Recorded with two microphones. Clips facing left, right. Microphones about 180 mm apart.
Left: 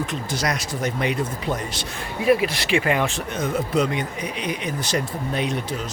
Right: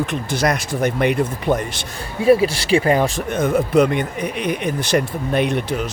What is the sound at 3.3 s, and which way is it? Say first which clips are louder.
Speech: right 6 dB; 55° right (ahead or behind).